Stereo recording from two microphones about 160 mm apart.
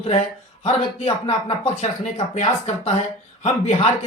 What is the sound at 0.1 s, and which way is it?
Speech, 45° left (ahead or behind).